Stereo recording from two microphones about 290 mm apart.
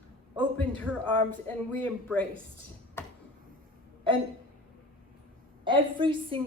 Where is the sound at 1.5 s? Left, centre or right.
Centre.